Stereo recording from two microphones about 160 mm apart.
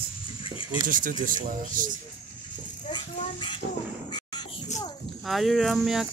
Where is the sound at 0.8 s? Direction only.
55° right (ahead or behind).